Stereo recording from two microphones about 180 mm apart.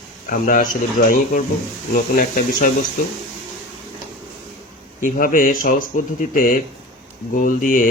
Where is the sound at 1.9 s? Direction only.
50° left (ahead or behind).